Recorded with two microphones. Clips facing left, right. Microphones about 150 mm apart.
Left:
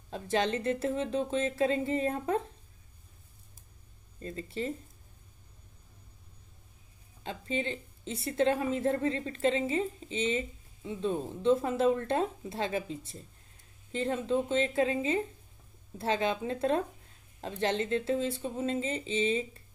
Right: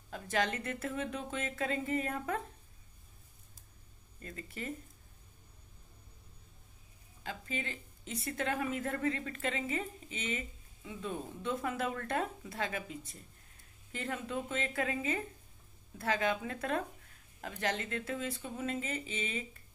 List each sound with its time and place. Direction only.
0.1 s a woman's voice: 30° left (ahead or behind)
4.2 s a woman's voice: 30° left (ahead or behind)
7.2 s a woman's voice: 25° left (ahead or behind)